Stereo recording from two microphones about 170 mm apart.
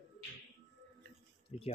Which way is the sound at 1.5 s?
40° left (ahead or behind).